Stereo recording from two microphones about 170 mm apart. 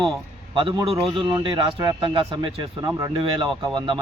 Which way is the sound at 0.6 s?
25° right (ahead or behind).